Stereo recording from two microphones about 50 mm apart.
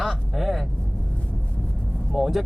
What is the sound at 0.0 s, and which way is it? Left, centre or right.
Vehicle, centre.